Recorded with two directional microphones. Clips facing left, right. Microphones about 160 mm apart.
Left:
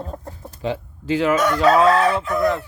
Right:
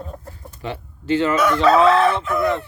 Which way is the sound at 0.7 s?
10° left (ahead or behind).